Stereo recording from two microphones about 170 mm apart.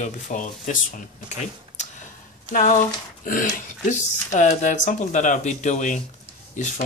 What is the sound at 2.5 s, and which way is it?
Speech, 50° left (ahead or behind).